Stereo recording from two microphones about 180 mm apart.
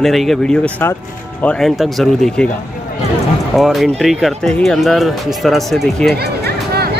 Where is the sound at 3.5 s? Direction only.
Centre (ahead or behind).